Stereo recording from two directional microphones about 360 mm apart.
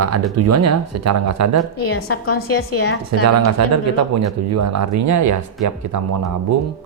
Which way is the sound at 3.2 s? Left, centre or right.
Right.